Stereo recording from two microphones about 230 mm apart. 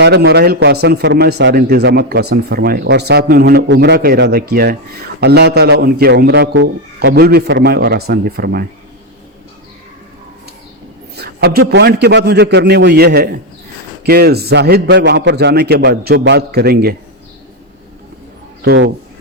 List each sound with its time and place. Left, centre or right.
0.0 s speech: right
11.2 s speech: right
18.6 s speech: right